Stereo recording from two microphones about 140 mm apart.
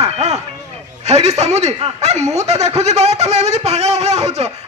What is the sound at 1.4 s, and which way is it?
Snicker, 50° right (ahead or behind).